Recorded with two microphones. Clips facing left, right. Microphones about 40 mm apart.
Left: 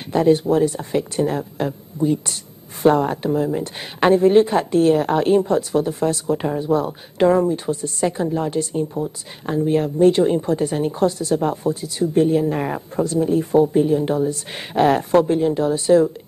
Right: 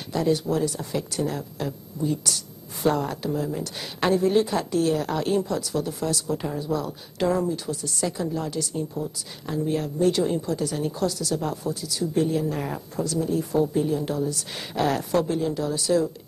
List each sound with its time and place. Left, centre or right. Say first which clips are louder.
0.1 s a woman's voice: left 8 dB; left